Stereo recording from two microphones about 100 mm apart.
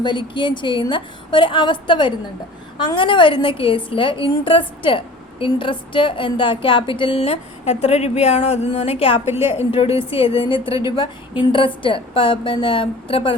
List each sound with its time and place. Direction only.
0.0 s a woman's voice: 50° left (ahead or behind)